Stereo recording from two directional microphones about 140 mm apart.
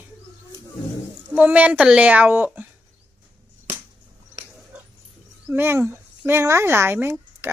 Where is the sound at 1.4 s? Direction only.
10° right (ahead or behind).